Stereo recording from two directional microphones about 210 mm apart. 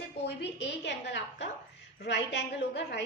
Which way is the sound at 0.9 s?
55° left (ahead or behind).